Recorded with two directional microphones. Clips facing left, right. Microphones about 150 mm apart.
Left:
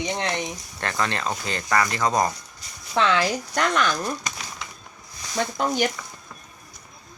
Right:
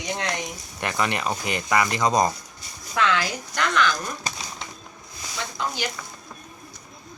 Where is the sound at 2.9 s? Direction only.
30° left (ahead or behind).